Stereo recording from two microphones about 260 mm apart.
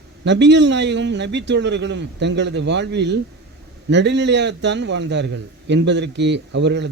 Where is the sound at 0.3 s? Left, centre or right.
Right.